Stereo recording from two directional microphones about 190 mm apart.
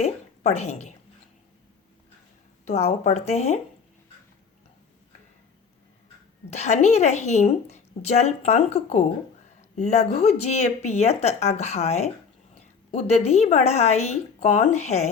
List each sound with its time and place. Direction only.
0.0 s a woman's voice: 35° left (ahead or behind)
2.6 s a woman's voice: 35° left (ahead or behind)
6.5 s a woman's voice: 35° left (ahead or behind)